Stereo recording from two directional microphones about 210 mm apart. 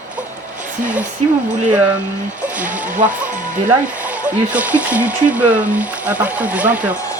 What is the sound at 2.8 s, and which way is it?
Speech, 35° right (ahead or behind).